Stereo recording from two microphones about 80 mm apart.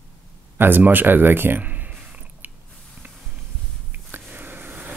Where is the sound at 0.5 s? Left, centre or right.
Right.